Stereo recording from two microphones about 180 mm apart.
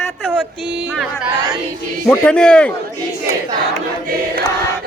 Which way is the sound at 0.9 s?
5° right (ahead or behind).